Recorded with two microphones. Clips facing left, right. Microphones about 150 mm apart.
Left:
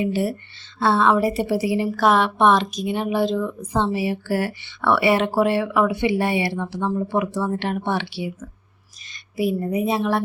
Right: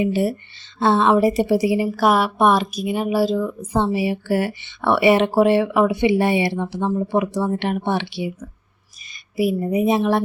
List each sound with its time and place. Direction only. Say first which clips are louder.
0.0 s a woman's voice: right 3 dB; 15° right (ahead or behind)